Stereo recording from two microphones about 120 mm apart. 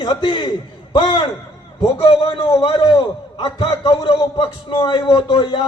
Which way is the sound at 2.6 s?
50° left (ahead or behind).